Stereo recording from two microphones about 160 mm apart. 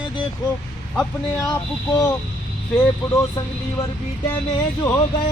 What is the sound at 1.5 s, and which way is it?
Speech, 20° left (ahead or behind).